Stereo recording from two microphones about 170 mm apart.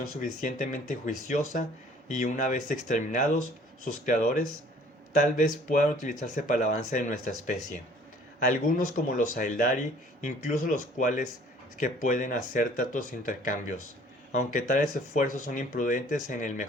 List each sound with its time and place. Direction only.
0.2 s speech: 50° left (ahead or behind)
9.1 s speech: 50° left (ahead or behind)